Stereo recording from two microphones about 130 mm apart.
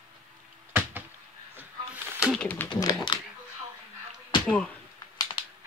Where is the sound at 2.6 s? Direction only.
35° left (ahead or behind).